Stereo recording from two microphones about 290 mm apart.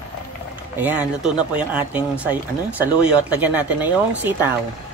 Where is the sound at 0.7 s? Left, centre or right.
Centre.